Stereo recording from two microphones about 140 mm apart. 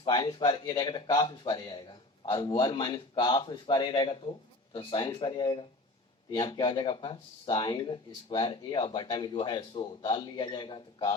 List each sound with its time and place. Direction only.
0.1 s speech: 30° left (ahead or behind)